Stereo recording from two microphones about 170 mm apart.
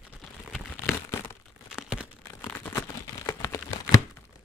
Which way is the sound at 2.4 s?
10° left (ahead or behind).